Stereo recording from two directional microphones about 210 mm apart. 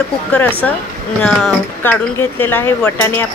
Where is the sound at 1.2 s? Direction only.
5° left (ahead or behind).